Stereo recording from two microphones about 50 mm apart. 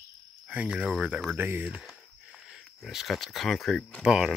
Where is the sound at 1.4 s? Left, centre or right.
Right.